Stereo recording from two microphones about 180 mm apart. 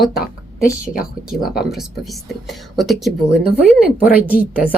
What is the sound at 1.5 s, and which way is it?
Speech, centre (ahead or behind).